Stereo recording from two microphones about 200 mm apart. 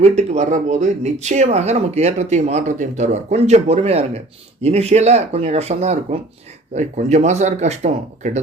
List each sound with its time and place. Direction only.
0.0 s speech: 35° right (ahead or behind)